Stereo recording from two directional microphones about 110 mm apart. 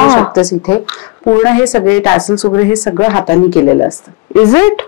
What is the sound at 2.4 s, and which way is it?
Speech, 30° left (ahead or behind).